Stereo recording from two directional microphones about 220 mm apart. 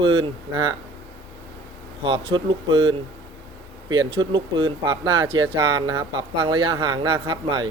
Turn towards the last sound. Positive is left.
turn(degrees=-20)  # may be behind; listen again after turning